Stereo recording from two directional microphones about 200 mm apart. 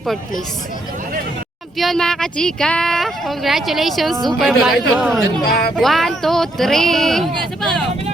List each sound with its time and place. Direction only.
1.8 s speech: centre (ahead or behind)
5.5 s speech: 50° left (ahead or behind)
5.7 s speech: centre (ahead or behind)